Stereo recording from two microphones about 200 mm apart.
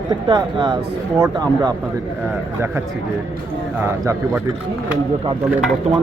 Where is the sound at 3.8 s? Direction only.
10° right (ahead or behind).